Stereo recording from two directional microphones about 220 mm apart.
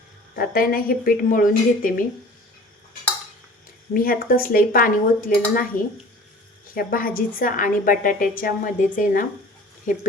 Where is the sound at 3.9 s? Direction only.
40° left (ahead or behind).